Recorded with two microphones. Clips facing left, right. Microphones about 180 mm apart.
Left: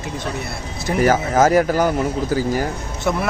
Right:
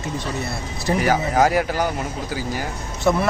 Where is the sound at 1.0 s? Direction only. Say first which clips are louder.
Left 4 dB; 45° left (ahead or behind).